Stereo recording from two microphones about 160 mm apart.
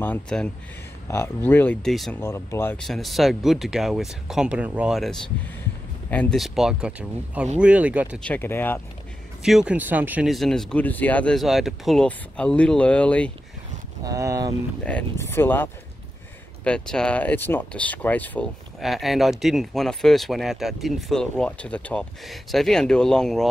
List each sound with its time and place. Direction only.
0.0 s speech: 10° left (ahead or behind)
2.2 s speech: 15° left (ahead or behind)
2.8 s speech: centre (ahead or behind)
6.4 s speech: centre (ahead or behind)
8.2 s speech: 10° left (ahead or behind)
9.4 s speech: 5° right (ahead or behind)
14.0 s speech: 20° right (ahead or behind)
14.8 s speech: 10° left (ahead or behind)
18.8 s speech: centre (ahead or behind)